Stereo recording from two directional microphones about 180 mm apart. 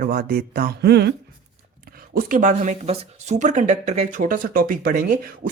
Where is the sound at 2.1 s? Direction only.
55° right (ahead or behind).